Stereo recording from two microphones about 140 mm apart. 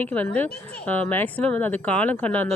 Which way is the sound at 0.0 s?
10° left (ahead or behind).